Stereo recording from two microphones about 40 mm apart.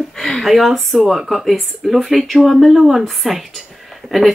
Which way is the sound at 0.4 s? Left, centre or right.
Centre.